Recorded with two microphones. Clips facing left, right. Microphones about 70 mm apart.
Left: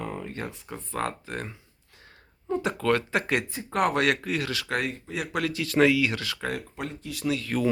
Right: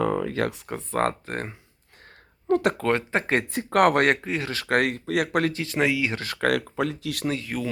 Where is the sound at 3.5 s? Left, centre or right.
Right.